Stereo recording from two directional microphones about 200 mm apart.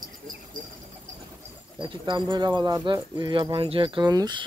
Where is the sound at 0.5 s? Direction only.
45° right (ahead or behind).